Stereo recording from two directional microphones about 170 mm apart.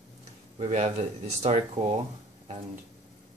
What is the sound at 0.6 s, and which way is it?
Speech, 40° right (ahead or behind).